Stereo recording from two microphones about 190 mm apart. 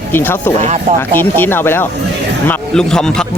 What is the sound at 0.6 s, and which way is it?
Speech, 35° right (ahead or behind).